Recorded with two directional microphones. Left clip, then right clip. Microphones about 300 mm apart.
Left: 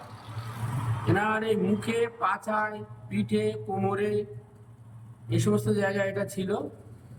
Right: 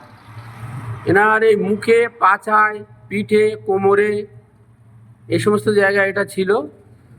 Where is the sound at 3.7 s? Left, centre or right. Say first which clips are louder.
Right 17 dB; right.